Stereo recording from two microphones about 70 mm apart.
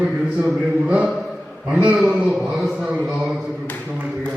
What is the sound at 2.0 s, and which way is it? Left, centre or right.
Speech, centre.